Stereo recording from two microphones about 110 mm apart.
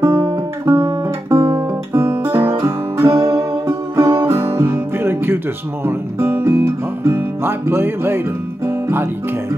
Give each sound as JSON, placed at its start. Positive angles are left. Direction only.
{"t": 0.0, "sound": "guitar", "side_deg": -35}
{"t": 1.3, "sound": "guitar", "side_deg": -25}
{"t": 5.9, "sound": "speech", "side_deg": -20}